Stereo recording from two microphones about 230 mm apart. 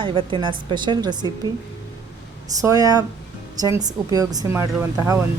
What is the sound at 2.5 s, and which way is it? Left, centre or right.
Speech, centre.